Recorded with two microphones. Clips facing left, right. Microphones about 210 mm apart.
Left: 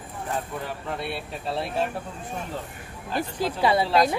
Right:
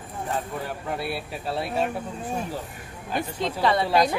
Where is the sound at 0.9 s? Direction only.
5° right (ahead or behind).